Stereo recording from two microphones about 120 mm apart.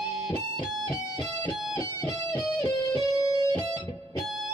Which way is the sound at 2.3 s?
25° left (ahead or behind).